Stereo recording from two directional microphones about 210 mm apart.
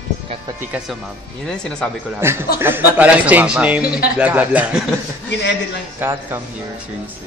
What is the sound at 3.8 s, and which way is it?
Speech, 45° left (ahead or behind).